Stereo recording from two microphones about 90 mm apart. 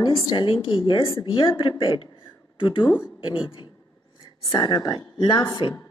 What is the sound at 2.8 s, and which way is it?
Speech, 25° left (ahead or behind).